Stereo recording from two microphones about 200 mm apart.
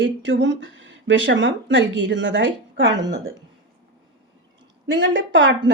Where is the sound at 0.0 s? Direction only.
65° right (ahead or behind).